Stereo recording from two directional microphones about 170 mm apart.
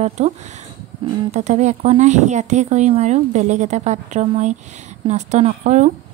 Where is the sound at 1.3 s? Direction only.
40° right (ahead or behind).